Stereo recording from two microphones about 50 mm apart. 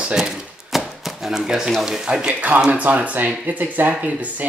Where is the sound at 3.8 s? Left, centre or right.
Right.